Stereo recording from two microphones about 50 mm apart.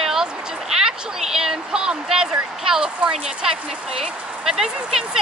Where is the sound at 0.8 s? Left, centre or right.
Centre.